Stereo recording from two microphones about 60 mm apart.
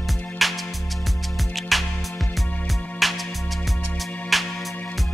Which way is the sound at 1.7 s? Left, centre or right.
Centre.